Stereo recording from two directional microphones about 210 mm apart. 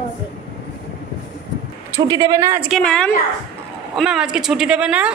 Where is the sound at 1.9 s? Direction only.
15° right (ahead or behind).